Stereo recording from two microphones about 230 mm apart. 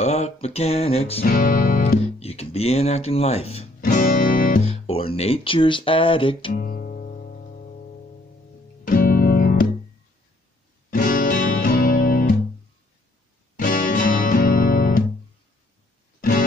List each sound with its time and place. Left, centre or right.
0.0 s speech: left
1.2 s speech: left
3.8 s speech: left
6.5 s music: left
8.8 s music: left
10.9 s music: left
13.6 s music: left
16.2 s music: left